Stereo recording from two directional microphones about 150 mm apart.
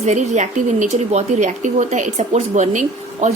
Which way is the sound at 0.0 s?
50° right (ahead or behind).